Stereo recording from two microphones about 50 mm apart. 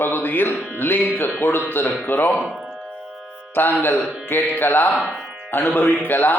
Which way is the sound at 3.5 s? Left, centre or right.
Left.